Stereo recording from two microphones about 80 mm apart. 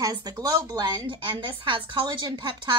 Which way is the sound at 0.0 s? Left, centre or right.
Right.